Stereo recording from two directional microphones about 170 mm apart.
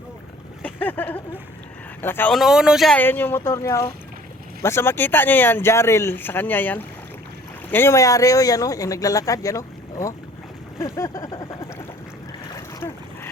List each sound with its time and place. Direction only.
0.6 s speech: 10° left (ahead or behind)
2.3 s speech: centre (ahead or behind)
3.0 s speech: 10° left (ahead or behind)